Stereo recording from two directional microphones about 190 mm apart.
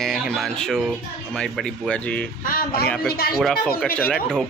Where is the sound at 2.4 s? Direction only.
50° left (ahead or behind).